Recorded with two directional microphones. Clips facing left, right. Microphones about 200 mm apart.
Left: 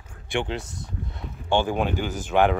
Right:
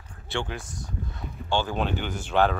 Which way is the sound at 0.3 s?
20° left (ahead or behind).